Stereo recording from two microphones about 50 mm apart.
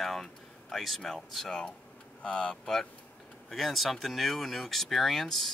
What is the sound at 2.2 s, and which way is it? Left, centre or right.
Speech, centre.